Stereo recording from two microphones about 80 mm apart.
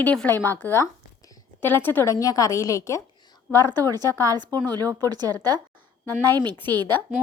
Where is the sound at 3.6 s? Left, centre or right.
Right.